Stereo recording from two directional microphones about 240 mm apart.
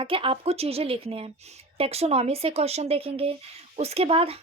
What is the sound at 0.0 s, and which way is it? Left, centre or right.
Speech, right.